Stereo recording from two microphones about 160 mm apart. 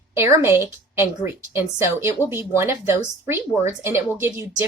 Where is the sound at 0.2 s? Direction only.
15° right (ahead or behind).